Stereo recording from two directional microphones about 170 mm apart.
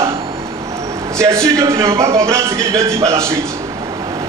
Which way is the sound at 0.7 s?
15° right (ahead or behind).